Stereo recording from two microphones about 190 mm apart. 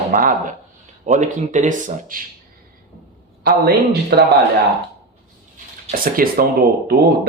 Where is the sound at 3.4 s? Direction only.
55° right (ahead or behind).